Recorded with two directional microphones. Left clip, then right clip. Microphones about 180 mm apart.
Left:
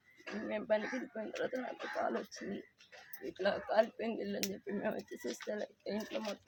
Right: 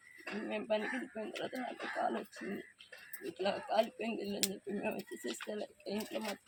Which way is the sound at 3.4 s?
10° left (ahead or behind).